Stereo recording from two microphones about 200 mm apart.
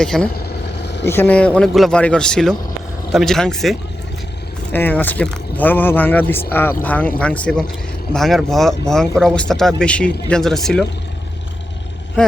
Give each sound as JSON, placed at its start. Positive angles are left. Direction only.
{"t": 0.0, "sound": "speech", "side_deg": 5}
{"t": 0.4, "sound": "vehicle", "side_deg": 60}
{"t": 1.0, "sound": "speech", "side_deg": 10}